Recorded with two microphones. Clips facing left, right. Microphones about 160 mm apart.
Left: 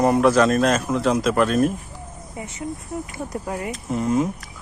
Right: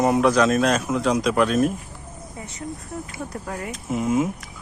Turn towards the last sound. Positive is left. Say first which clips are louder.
# left 1 dB
turn(degrees=-5)  # may be behind; listen again after turning